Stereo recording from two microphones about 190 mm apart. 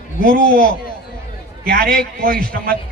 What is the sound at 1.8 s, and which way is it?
Speech, 5° left (ahead or behind).